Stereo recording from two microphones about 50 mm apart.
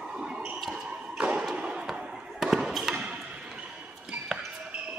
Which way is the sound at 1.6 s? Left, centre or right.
Right.